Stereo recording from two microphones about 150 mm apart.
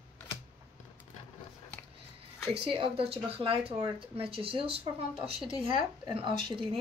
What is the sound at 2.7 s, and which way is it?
Speech, 40° right (ahead or behind).